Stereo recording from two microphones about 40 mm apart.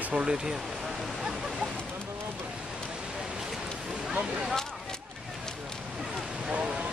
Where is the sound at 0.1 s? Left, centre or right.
Right.